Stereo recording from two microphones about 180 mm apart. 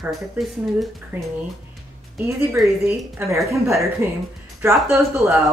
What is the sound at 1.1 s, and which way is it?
Speech, 15° right (ahead or behind).